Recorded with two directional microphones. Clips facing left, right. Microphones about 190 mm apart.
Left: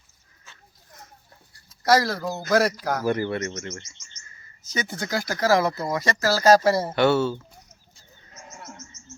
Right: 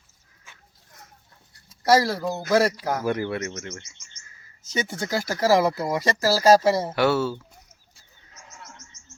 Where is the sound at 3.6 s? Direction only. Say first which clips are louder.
Left 2 dB; 60° right (ahead or behind).